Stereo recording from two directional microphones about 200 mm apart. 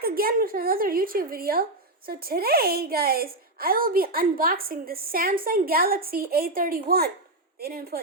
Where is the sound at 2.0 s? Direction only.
50° right (ahead or behind).